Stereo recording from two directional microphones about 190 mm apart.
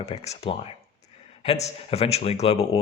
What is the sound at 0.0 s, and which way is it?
Speech, 35° left (ahead or behind).